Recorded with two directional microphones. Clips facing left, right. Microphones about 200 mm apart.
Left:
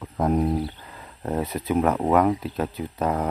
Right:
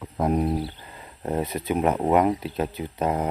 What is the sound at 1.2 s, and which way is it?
Speech, 20° right (ahead or behind).